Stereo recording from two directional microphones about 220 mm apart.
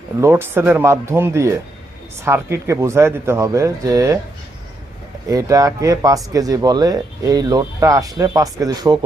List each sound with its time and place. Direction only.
0.2 s speech: 10° right (ahead or behind)
5.3 s speech: 15° right (ahead or behind)